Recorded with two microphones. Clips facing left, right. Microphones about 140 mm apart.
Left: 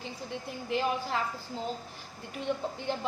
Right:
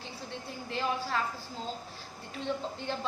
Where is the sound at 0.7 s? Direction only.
20° left (ahead or behind).